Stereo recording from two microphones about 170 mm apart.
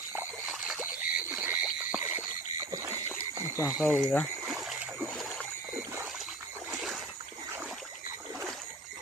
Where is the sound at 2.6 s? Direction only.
20° right (ahead or behind).